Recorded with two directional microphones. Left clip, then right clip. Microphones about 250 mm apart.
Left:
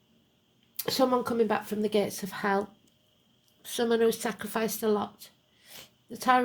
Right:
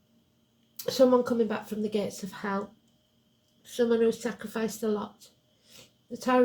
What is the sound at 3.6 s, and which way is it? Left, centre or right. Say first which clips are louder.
Speech: right 1 dB; left.